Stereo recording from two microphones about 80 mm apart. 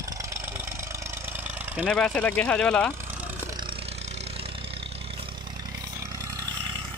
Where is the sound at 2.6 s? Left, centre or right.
Centre.